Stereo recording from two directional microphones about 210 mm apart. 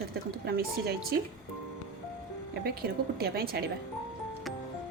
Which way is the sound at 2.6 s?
50° right (ahead or behind).